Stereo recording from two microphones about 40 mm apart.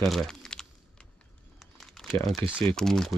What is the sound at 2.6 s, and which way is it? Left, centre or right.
Speech, centre.